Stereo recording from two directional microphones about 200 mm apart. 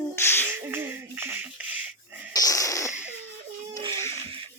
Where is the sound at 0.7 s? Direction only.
10° right (ahead or behind).